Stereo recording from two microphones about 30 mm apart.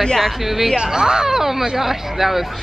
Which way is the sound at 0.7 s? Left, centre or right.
Right.